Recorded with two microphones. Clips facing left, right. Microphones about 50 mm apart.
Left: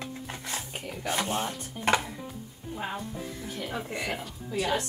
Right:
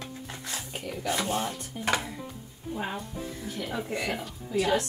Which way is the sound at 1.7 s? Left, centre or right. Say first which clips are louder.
Left 3 dB; centre.